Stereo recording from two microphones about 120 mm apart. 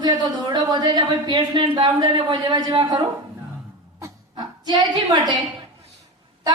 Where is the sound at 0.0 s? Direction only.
35° right (ahead or behind).